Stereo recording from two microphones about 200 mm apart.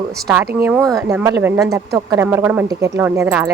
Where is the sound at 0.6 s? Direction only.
15° right (ahead or behind).